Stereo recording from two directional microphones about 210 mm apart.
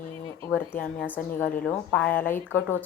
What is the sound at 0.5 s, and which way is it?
A woman's voice, 5° left (ahead or behind).